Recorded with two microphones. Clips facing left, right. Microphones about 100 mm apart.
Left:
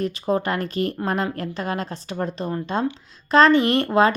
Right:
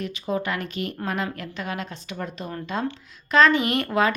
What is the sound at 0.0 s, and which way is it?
Speech, 40° left (ahead or behind).